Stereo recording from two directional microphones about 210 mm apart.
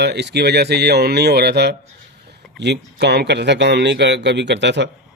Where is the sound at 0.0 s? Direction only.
55° right (ahead or behind).